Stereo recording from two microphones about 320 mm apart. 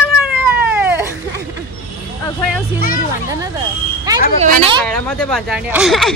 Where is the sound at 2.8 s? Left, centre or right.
Left.